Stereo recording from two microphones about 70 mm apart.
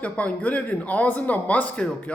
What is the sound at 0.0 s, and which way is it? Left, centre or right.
Speech, centre.